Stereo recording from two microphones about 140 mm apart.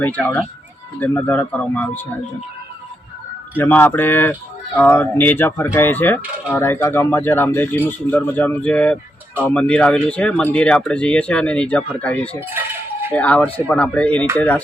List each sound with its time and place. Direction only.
0.0 s speech: 10° left (ahead or behind)
3.6 s speech: 15° left (ahead or behind)
12.4 s a sound: 15° right (ahead or behind)
13.1 s speech: 10° left (ahead or behind)